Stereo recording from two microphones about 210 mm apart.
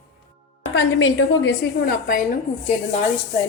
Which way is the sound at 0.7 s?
60° left (ahead or behind).